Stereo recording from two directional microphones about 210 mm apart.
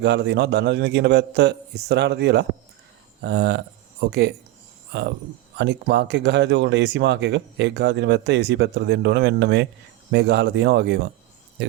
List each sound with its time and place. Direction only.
0.0 s a man's voice: 55° right (ahead or behind)
4.9 s speech: 50° right (ahead or behind)